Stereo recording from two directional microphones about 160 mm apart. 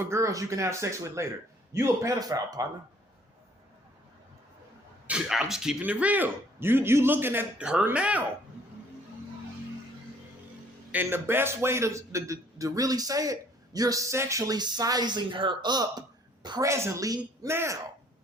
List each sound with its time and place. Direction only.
0.0 s a man's voice: 15° right (ahead or behind)
5.0 s speech: 5° right (ahead or behind)
10.9 s a man's voice: 15° right (ahead or behind)